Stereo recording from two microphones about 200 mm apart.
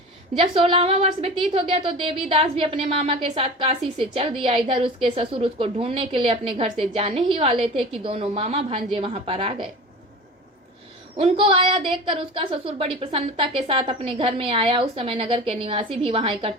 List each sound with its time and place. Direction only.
0.3 s a woman's voice: 30° right (ahead or behind)
11.2 s a woman's voice: 30° right (ahead or behind)